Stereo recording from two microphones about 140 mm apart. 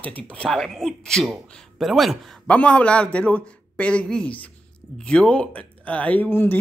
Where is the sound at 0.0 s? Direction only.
10° left (ahead or behind).